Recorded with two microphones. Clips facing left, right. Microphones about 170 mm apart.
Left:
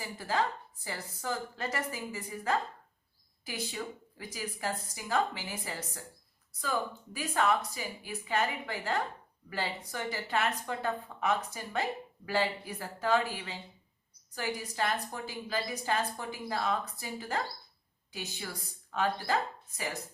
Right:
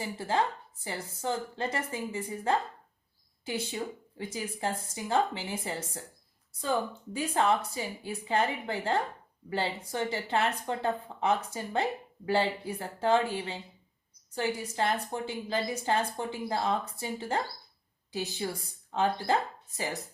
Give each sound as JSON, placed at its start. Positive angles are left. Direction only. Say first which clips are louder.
{"t": 0.0, "sound": "a woman's voice", "louder": "right 3 dB", "side_deg": -25}